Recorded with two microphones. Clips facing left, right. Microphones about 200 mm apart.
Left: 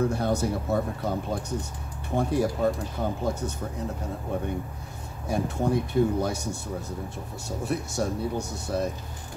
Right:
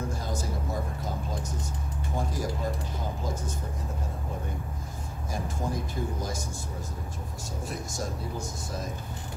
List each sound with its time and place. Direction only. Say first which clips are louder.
0.1 s speech: left 8 dB; 65° left (ahead or behind)
5.3 s speech: left 8 dB; 65° left (ahead or behind)
7.6 s speech: left 7 dB; 65° left (ahead or behind)